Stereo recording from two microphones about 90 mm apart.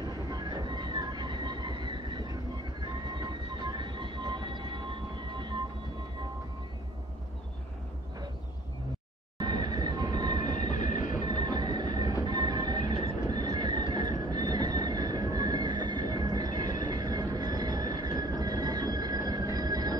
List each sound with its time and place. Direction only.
0.5 s train: 55° right (ahead or behind)
3.6 s train: 60° right (ahead or behind)
9.5 s train: 50° right (ahead or behind)